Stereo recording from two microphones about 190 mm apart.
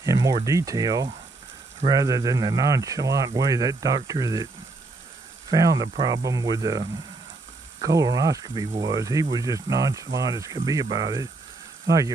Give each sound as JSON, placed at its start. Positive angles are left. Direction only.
{"t": 0.0, "sound": "speech", "side_deg": -20}
{"t": 5.5, "sound": "speech", "side_deg": -20}